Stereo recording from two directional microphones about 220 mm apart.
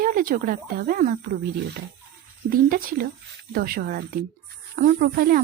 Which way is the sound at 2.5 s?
40° right (ahead or behind).